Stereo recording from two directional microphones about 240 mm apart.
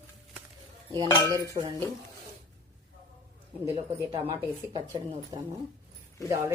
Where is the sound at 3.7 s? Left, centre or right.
Right.